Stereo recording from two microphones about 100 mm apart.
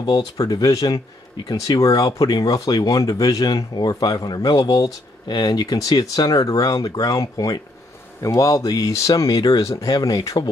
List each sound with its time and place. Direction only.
0.0 s speech: 55° left (ahead or behind)
0.4 s speech: 40° left (ahead or behind)